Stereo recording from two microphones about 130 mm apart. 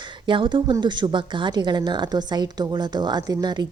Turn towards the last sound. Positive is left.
turn(degrees=-35)  # may be behind; listen again after turning